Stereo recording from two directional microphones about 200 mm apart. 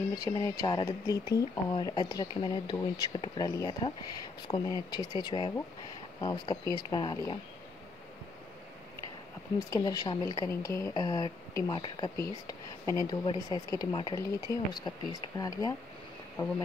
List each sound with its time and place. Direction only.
0.1 s speech: 20° left (ahead or behind)
9.6 s speech: 15° left (ahead or behind)